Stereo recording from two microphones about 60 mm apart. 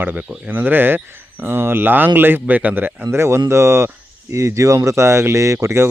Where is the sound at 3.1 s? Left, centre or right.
Right.